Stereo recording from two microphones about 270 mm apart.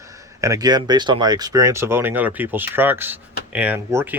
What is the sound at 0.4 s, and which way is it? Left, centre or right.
Speech, centre.